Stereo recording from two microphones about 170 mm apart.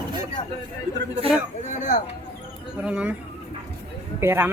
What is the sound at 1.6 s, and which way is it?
Speech, 50° left (ahead or behind).